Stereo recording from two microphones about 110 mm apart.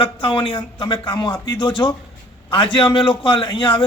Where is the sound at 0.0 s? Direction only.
50° left (ahead or behind).